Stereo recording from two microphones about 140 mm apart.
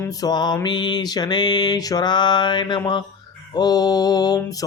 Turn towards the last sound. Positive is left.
turn(degrees=30)  # may be behind; listen again after turning